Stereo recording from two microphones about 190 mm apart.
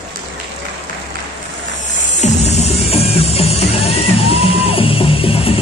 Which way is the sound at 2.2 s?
35° left (ahead or behind).